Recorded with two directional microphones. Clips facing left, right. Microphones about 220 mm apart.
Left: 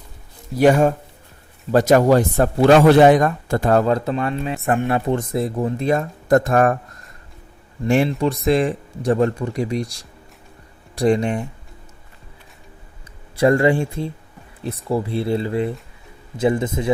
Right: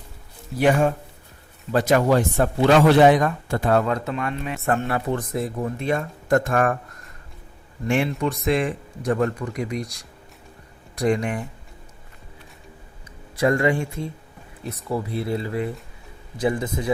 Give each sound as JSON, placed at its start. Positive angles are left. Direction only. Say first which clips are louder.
{"t": 0.5, "sound": "speech", "louder": "left 5 dB", "side_deg": 40}
{"t": 4.6, "sound": "speech", "louder": "left 3 dB", "side_deg": 20}
{"t": 7.9, "sound": "speech", "louder": "left 5 dB", "side_deg": 35}
{"t": 13.3, "sound": "speech", "louder": "left 4 dB", "side_deg": 30}